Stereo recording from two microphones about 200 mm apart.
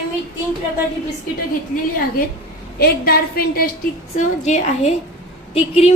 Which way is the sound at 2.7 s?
50° left (ahead or behind).